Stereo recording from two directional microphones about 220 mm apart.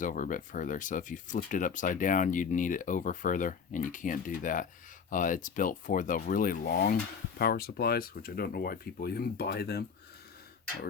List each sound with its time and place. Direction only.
0.0 s speech: 35° left (ahead or behind)